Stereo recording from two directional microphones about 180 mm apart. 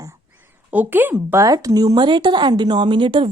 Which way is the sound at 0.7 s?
10° right (ahead or behind).